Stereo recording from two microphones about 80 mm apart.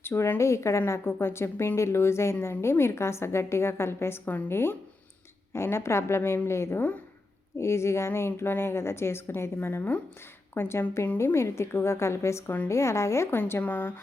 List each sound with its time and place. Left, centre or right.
0.0 s a woman's voice: left
13.4 s speech: left